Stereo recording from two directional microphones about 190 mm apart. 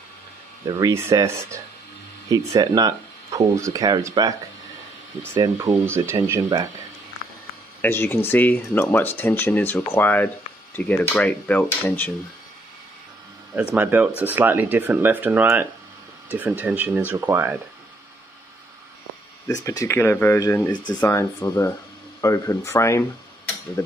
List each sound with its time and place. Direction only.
0.7 s speech: 20° right (ahead or behind)
5.3 s speech: 15° right (ahead or behind)
7.8 s speech: 10° left (ahead or behind)
13.7 s speech: 10° right (ahead or behind)
19.4 s speech: 20° left (ahead or behind)